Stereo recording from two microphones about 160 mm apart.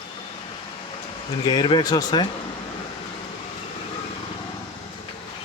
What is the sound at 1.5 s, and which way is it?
Speech, 30° left (ahead or behind).